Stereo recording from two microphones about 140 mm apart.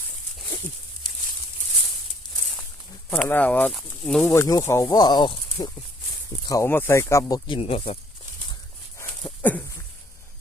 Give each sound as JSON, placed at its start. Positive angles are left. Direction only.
{"t": 3.2, "sound": "speech", "side_deg": 10}
{"t": 4.3, "sound": "speech", "side_deg": 25}
{"t": 6.5, "sound": "speech", "side_deg": 15}
{"t": 9.0, "sound": "dog", "side_deg": 15}